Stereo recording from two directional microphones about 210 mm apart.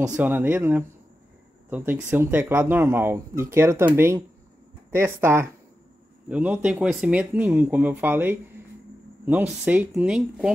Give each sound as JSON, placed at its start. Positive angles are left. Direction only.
{"t": 0.2, "sound": "speech", "side_deg": -10}